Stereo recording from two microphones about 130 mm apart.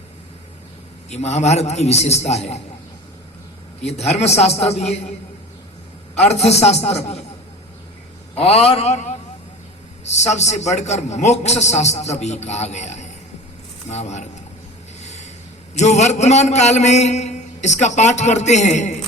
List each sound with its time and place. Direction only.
1.1 s a man's voice: 60° left (ahead or behind)
3.8 s a man's voice: 55° left (ahead or behind)
6.1 s a man's voice: 55° left (ahead or behind)
8.4 s a man's voice: 50° left (ahead or behind)
15.0 s a sound: 60° left (ahead or behind)
15.7 s a man's voice: 60° left (ahead or behind)